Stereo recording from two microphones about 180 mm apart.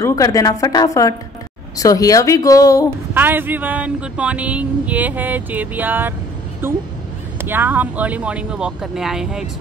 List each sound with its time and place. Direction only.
0.0 s a woman's voice: 20° left (ahead or behind)
3.2 s speech: 10° right (ahead or behind)